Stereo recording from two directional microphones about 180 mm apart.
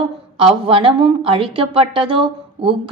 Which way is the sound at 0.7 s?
30° right (ahead or behind).